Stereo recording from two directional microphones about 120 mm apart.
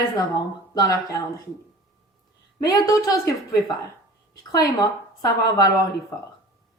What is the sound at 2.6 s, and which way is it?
Speech, 30° left (ahead or behind).